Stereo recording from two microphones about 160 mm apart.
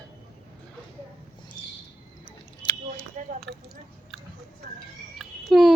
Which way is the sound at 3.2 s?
50° right (ahead or behind).